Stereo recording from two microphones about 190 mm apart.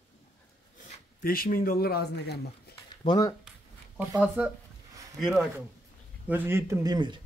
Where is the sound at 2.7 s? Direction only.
25° left (ahead or behind).